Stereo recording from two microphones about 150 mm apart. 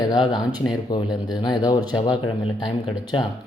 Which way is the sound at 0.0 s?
30° left (ahead or behind).